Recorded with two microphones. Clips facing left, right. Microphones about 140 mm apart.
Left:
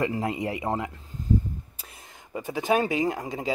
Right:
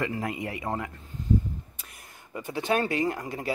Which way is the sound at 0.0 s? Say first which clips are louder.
Left 4 dB; 25° left (ahead or behind).